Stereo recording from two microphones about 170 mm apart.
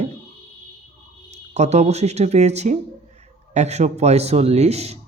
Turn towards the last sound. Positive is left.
turn(degrees=-40)  # may be behind; listen again after turning